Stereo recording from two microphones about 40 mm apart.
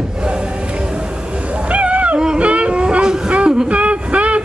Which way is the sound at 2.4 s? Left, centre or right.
Right.